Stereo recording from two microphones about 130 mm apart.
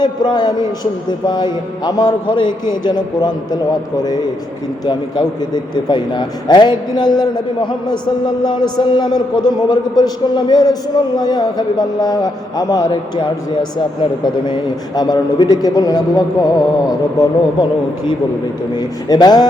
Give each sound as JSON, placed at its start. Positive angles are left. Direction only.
{"t": 0.0, "sound": "a man's voice", "side_deg": 35}
{"t": 5.7, "sound": "a man's voice", "side_deg": 35}